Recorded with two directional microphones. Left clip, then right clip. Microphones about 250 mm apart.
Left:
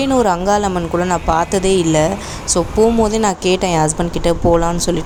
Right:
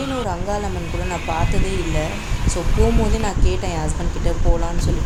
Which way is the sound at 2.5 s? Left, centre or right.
Left.